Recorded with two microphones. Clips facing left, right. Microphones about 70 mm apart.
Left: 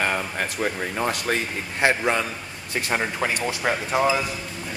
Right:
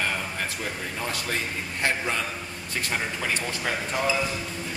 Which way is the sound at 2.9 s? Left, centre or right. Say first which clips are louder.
Left 6 dB; left.